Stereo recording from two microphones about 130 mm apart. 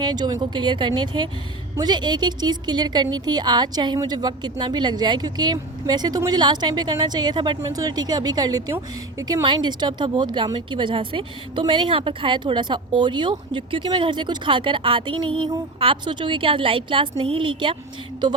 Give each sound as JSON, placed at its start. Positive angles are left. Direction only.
{"t": 0.0, "sound": "speech", "side_deg": -35}
{"t": 9.4, "sound": "speech", "side_deg": -35}